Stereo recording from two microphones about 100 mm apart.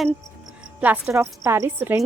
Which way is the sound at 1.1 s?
30° right (ahead or behind).